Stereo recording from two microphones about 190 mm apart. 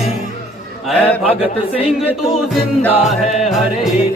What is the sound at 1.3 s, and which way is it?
Speech, 30° left (ahead or behind).